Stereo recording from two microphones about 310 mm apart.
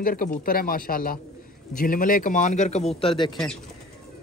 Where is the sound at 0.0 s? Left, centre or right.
Left.